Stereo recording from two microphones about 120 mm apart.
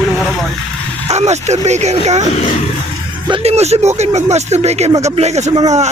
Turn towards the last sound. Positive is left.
turn(degrees=-65)  # may be behind; listen again after turning